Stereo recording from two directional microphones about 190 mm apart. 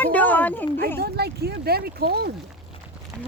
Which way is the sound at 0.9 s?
55° right (ahead or behind).